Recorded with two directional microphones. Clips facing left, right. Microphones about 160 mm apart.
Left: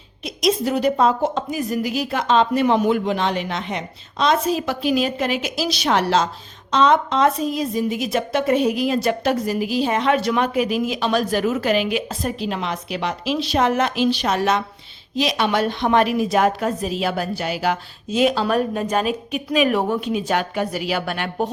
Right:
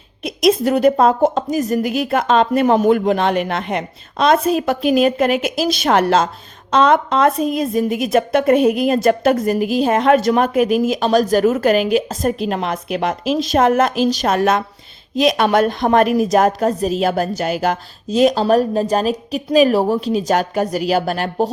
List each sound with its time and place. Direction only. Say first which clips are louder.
0.3 s a woman's voice: right 5 dB; 55° right (ahead or behind); by 21.5 s 35° right (ahead or behind)